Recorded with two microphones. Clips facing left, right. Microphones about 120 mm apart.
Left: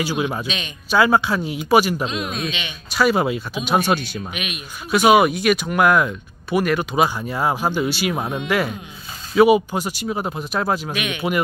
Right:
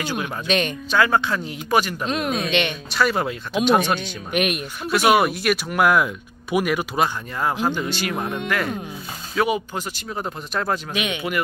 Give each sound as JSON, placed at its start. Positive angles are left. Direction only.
{"t": 0.0, "sound": "speech", "side_deg": 10}
{"t": 0.5, "sound": "speech", "side_deg": -55}
{"t": 0.8, "sound": "speech", "side_deg": 10}
{"t": 2.0, "sound": "speech", "side_deg": -55}
{"t": 2.9, "sound": "speech", "side_deg": 5}
{"t": 4.3, "sound": "speech", "side_deg": -55}
{"t": 4.9, "sound": "speech", "side_deg": 0}
{"t": 7.0, "sound": "speech", "side_deg": 10}
{"t": 11.0, "sound": "speech", "side_deg": -25}